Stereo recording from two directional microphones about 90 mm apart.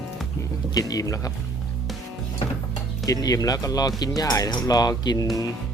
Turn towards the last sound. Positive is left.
turn(degrees=50)  # may be behind; listen again after turning